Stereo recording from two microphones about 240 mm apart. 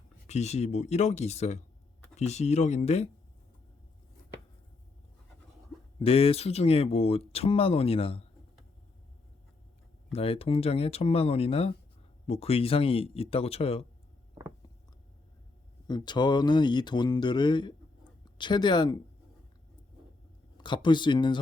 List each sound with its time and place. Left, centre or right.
0.3 s speech: left
6.0 s speech: left
10.1 s speech: left
15.9 s speech: centre
20.6 s speech: centre